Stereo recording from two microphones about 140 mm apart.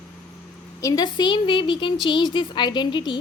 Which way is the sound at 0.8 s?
25° left (ahead or behind).